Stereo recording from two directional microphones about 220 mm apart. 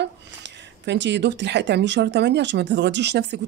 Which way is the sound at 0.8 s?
55° right (ahead or behind).